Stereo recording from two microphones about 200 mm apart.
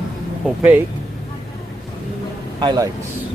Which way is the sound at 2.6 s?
20° right (ahead or behind).